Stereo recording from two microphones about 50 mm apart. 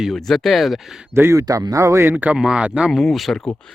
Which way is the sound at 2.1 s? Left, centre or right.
Right.